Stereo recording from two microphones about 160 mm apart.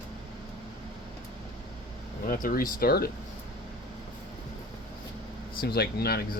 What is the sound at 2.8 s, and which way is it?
Speech, 75° left (ahead or behind).